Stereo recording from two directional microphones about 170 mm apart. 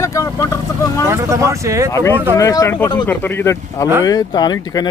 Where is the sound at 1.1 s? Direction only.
15° right (ahead or behind).